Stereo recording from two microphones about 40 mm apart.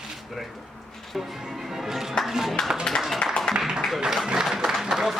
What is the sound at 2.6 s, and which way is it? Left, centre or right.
Music, centre.